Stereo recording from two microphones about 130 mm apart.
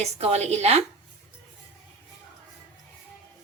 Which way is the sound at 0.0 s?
55° right (ahead or behind).